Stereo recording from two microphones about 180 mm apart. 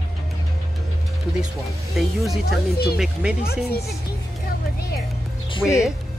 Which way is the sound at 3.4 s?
60° left (ahead or behind).